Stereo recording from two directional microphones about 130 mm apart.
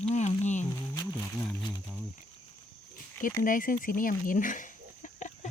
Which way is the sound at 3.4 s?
90° left.